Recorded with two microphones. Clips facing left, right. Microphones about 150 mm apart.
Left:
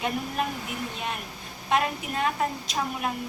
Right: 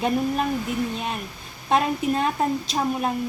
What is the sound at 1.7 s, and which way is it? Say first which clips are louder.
A woman's voice: right 5 dB; 30° right (ahead or behind).